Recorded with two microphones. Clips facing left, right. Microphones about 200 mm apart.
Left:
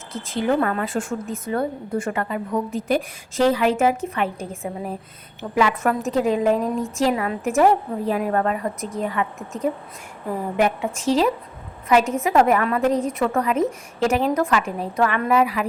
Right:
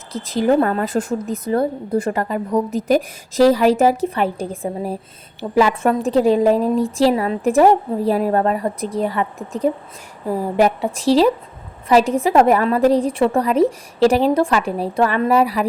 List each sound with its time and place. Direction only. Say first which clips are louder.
0.1 s a woman's voice: right 5 dB; 40° right (ahead or behind)